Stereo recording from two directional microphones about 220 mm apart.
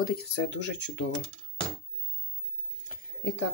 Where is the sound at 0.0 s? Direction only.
55° left (ahead or behind).